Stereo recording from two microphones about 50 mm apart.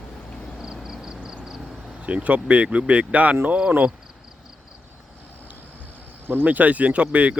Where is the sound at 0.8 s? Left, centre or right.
Centre.